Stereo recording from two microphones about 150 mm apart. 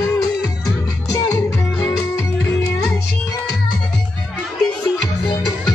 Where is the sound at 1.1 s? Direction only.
20° left (ahead or behind).